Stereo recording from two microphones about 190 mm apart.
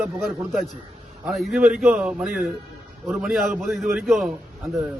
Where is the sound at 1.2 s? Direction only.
Centre (ahead or behind).